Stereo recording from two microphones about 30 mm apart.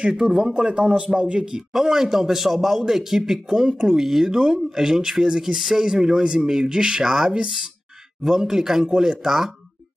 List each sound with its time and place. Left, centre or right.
0.4 s speech: right
0.7 s a man's voice: right
1.7 s speech: centre